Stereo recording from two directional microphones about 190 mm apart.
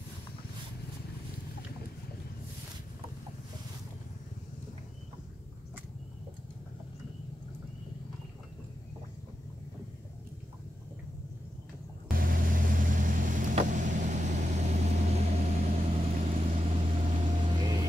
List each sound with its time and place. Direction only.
12.1 s vehicle: 50° right (ahead or behind); by 17.8 s 25° right (ahead or behind)